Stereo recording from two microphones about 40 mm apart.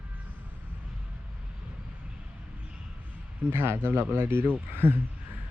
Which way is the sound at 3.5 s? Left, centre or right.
Right.